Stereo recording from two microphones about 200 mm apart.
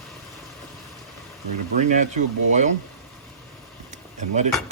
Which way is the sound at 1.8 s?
35° right (ahead or behind).